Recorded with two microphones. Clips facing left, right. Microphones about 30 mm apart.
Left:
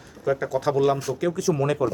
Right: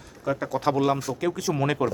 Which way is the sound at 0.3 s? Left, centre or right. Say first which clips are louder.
Left 2 dB; centre.